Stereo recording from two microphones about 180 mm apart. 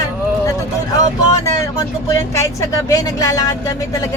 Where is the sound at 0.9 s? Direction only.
20° left (ahead or behind).